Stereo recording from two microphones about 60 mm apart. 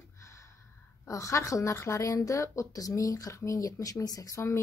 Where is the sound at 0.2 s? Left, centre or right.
Left.